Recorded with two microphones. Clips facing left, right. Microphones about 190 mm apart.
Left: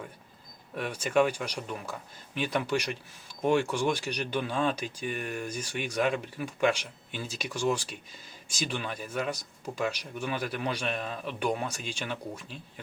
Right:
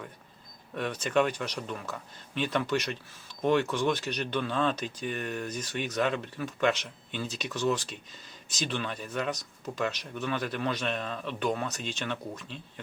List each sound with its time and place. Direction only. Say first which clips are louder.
0.8 s speech: left 1 dB; 10° left (ahead or behind)